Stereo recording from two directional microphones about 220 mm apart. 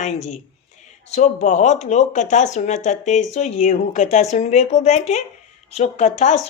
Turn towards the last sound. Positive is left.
turn(degrees=30)  # may be behind; listen again after turning